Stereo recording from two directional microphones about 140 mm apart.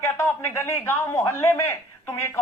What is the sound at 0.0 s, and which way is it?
A man's voice, 20° left (ahead or behind).